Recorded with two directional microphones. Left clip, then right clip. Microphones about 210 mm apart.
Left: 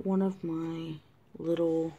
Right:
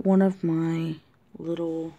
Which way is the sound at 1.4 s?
5° right (ahead or behind).